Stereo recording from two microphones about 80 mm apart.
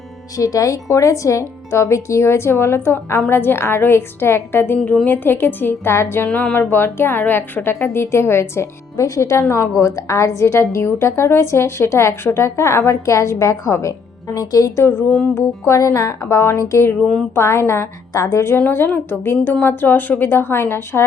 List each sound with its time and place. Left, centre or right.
0.3 s a woman's voice: left
6.2 s a woman's voice: centre
6.6 s a woman's voice: left
14.8 s a woman's voice: left
18.5 s a woman's voice: left